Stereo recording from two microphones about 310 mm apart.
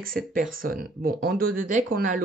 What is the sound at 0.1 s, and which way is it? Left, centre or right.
Speech, right.